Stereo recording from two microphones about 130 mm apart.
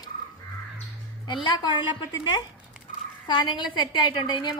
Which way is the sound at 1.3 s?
35° left (ahead or behind).